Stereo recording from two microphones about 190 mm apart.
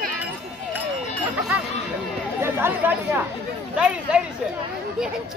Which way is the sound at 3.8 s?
5° right (ahead or behind).